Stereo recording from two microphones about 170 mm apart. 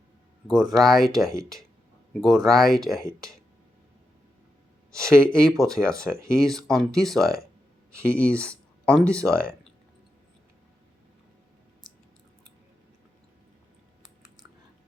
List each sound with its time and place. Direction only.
0.4 s speech: centre (ahead or behind)
5.0 s speech: 5° left (ahead or behind)
8.4 s a sound: 5° left (ahead or behind)